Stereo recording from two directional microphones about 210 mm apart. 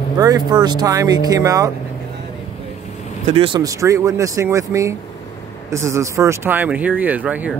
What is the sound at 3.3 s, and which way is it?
Speech, 25° right (ahead or behind).